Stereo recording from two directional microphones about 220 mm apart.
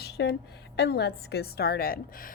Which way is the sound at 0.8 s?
50° left (ahead or behind).